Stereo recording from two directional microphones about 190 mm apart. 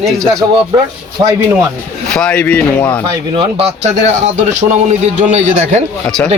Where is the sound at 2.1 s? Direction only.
5° left (ahead or behind).